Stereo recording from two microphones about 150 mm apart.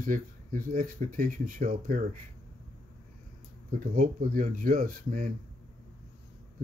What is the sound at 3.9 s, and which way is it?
Speech, 65° right (ahead or behind).